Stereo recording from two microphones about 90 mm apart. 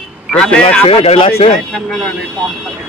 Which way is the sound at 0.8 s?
90° left.